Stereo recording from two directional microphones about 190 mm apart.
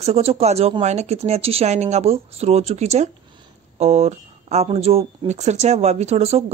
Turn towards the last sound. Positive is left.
turn(degrees=-35)  # may be behind; listen again after turning